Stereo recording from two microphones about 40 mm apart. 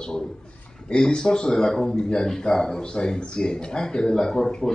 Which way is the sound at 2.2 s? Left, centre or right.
Centre.